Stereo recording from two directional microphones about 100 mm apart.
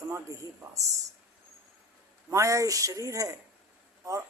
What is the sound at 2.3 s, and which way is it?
Speech, 30° right (ahead or behind).